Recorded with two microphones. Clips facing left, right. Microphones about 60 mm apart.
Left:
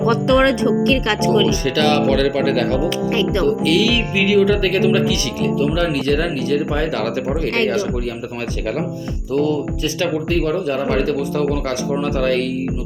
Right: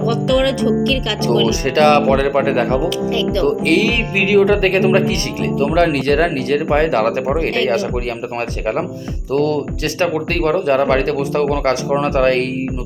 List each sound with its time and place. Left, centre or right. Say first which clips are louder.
0.1 s speech: left 2 dB; left
1.6 s speech: right 4 dB; right
2.0 s speech: right 2 dB; right
3.4 s speech: right 3 dB; right
5.5 s speech: right 6 dB; right
9.3 s speech: right 2 dB; right